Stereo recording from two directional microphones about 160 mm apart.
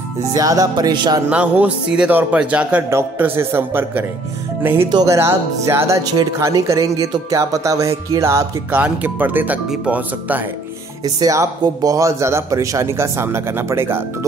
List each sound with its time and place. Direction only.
0.3 s speech: 20° right (ahead or behind)
1.3 s a man's voice: 10° right (ahead or behind)
11.1 s a man's voice: 25° right (ahead or behind)